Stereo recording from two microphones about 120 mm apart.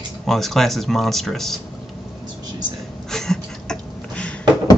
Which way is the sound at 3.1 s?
5° left (ahead or behind).